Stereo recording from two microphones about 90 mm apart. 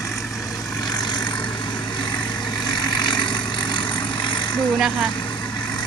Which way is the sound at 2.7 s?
55° left (ahead or behind).